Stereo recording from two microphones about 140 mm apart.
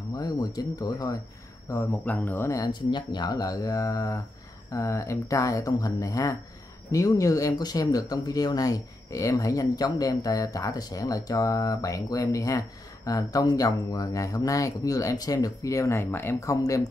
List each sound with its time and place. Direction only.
0.2 s speech: 25° left (ahead or behind)
2.0 s speech: 10° left (ahead or behind)